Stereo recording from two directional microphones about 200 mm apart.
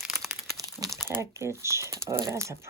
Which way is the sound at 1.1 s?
15° right (ahead or behind).